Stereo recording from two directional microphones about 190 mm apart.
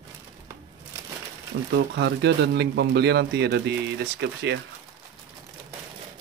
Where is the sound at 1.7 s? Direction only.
65° right (ahead or behind).